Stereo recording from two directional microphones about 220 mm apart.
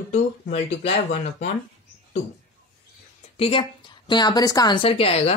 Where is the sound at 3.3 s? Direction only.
25° left (ahead or behind).